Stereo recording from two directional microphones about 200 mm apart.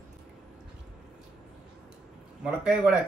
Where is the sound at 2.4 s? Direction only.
5° right (ahead or behind).